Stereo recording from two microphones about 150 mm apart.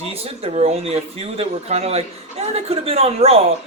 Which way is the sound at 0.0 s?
40° right (ahead or behind).